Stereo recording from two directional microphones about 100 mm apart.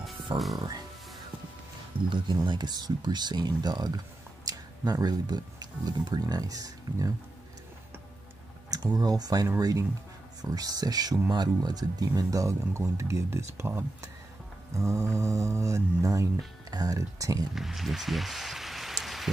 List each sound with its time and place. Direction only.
0.6 s speech: 40° right (ahead or behind)
2.0 s speech: 55° right (ahead or behind); by 7.1 s 35° right (ahead or behind)
8.6 s speech: 40° right (ahead or behind)
17.6 s speech: centre (ahead or behind)